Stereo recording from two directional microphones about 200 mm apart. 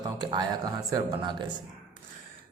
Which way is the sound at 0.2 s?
20° right (ahead or behind).